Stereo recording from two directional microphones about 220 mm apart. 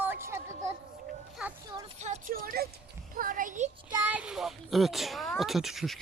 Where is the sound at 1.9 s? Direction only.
30° right (ahead or behind).